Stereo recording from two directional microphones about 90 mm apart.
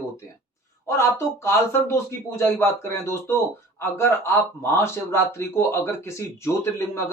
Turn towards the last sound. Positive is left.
turn(degrees=30)  # may be behind; listen again after turning